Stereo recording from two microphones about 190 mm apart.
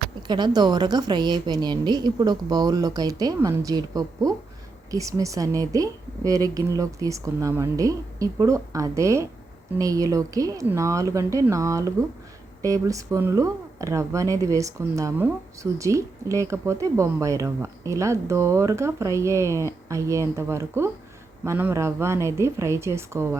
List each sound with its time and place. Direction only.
0.2 s a woman's voice: 25° right (ahead or behind)